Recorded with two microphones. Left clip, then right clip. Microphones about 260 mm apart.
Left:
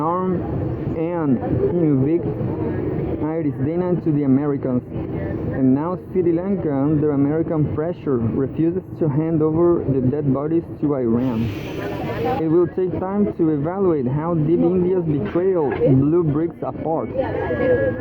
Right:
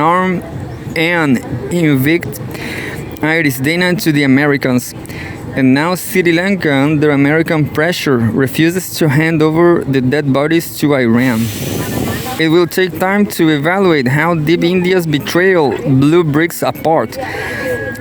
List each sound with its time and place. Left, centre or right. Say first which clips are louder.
0.0 s a sound: right 9 dB; right
0.9 s speech: right 10 dB; right
3.2 s speech: right 14 dB; right
11.0 s speech: right 8 dB; right
12.4 s speech: right 9 dB; right
15.3 s speech: right 9 dB; right
16.1 s speech: right 8 dB; right